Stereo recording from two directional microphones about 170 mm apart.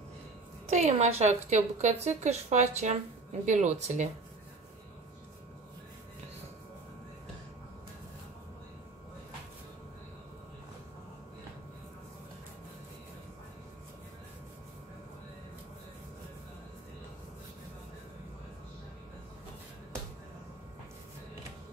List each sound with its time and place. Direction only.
0.7 s a woman's voice: 40° right (ahead or behind)